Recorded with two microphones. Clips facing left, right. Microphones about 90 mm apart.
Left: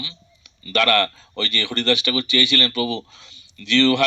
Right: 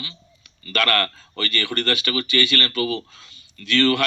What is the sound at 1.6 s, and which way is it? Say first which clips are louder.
A man's voice: left 5 dB; 40° right (ahead or behind).